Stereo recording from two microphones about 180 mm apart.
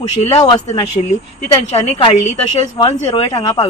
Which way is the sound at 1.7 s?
35° left (ahead or behind).